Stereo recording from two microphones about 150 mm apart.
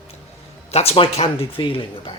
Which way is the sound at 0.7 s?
40° left (ahead or behind).